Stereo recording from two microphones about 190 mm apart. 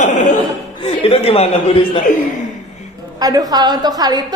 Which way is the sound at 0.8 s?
30° left (ahead or behind).